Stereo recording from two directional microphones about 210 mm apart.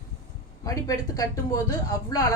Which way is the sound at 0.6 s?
15° left (ahead or behind).